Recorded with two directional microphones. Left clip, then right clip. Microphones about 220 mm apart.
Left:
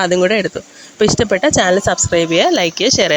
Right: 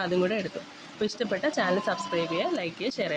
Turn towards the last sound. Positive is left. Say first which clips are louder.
# left 17 dB
turn(degrees=40)  # may be behind; listen again after turning